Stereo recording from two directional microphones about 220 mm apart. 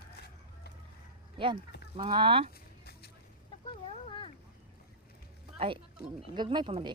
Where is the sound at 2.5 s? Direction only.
45° left (ahead or behind).